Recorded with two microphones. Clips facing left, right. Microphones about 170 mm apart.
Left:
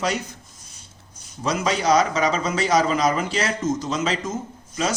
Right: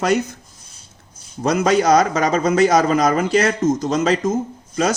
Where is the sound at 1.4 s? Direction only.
50° right (ahead or behind).